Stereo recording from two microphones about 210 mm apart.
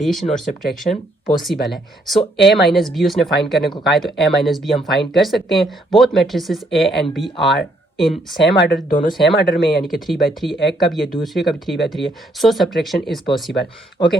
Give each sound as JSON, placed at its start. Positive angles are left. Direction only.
{"t": 0.0, "sound": "speech", "side_deg": 0}
{"t": 8.9, "sound": "speech", "side_deg": 40}
{"t": 9.2, "sound": "speech", "side_deg": 0}